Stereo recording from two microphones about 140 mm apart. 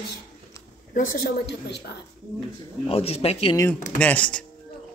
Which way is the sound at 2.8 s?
45° left (ahead or behind).